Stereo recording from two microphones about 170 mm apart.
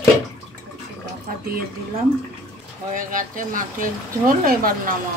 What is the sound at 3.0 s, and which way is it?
Speech, 50° right (ahead or behind).